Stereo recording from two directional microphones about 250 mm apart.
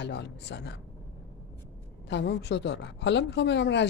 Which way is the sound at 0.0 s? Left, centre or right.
Left.